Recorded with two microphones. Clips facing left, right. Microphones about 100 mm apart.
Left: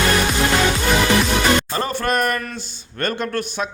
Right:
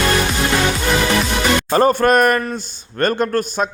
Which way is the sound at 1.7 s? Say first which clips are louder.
Right 8 dB; 45° right (ahead or behind).